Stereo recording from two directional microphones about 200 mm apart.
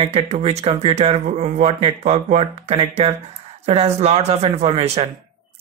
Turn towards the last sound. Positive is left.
turn(degrees=-30)  # may be behind; listen again after turning